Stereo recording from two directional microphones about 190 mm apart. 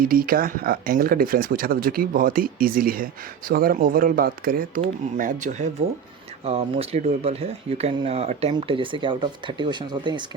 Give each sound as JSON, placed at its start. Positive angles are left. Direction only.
{"t": 0.0, "sound": "speech", "side_deg": -50}